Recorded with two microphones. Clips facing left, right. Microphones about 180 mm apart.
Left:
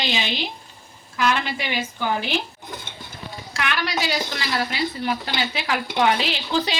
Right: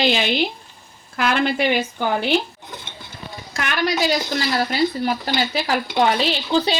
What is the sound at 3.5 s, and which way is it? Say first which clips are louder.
A woman's voice: right 4 dB; 45° right (ahead or behind).